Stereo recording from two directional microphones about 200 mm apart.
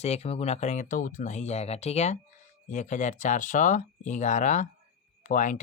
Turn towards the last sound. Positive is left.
turn(degrees=40)  # may be behind; listen again after turning